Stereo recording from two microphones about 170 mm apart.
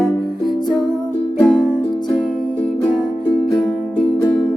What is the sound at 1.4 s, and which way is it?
Music, centre (ahead or behind).